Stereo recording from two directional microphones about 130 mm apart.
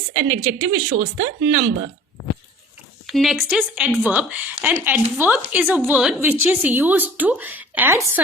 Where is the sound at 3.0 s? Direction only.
Centre (ahead or behind).